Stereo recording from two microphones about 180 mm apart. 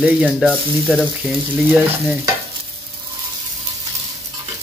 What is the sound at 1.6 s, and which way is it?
Speech, 10° right (ahead or behind).